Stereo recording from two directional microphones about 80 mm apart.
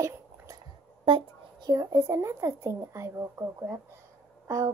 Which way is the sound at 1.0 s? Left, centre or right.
Right.